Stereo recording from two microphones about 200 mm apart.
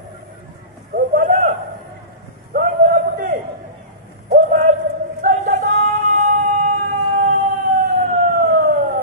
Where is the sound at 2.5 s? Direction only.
45° right (ahead or behind).